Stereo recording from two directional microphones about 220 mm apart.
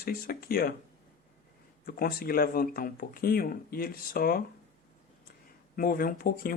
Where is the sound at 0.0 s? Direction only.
45° left (ahead or behind).